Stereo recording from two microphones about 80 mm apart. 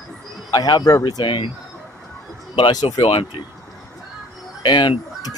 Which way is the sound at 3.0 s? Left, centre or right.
Left.